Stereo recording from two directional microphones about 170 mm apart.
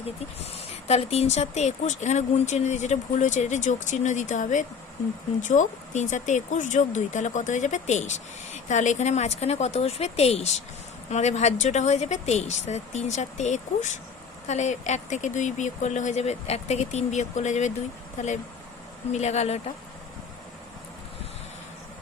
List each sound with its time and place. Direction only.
0.9 s speech: 40° left (ahead or behind)